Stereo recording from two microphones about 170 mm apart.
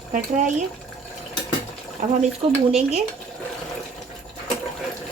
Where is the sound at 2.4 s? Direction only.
35° right (ahead or behind).